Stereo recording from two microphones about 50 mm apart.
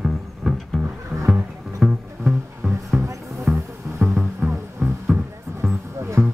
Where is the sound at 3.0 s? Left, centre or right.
Right.